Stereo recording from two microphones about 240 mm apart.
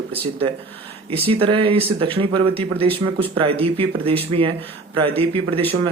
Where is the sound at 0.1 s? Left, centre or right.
Right.